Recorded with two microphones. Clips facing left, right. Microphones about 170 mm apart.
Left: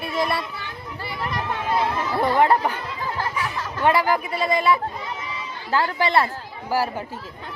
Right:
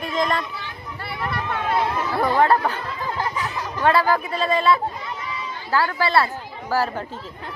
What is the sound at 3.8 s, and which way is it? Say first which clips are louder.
A man's voice: right 1 dB; 15° left (ahead or behind).